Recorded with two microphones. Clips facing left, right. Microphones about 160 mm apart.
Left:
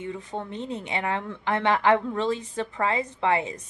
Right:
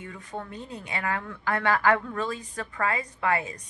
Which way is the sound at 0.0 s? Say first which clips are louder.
Left 5 dB; 25° left (ahead or behind).